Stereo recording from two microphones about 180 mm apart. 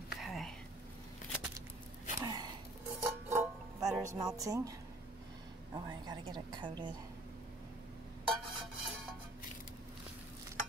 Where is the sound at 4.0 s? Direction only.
20° right (ahead or behind).